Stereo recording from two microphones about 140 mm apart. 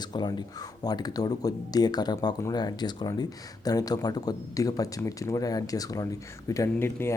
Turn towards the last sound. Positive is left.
turn(degrees=15)  # may be behind; listen again after turning